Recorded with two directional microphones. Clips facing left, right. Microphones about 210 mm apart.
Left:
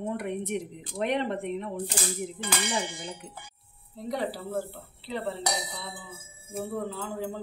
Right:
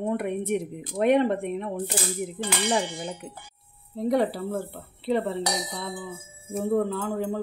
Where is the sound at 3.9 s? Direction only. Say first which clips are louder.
Right 8 dB; 55° right (ahead or behind).